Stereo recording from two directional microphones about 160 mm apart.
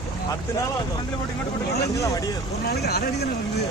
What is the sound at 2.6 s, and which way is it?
Speech, 80° left.